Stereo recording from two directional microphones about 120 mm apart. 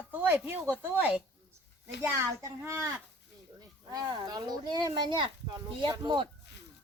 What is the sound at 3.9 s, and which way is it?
Speech, 35° right (ahead or behind).